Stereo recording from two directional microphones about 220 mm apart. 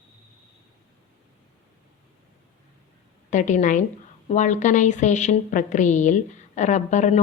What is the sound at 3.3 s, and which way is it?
A woman's voice, 35° left (ahead or behind).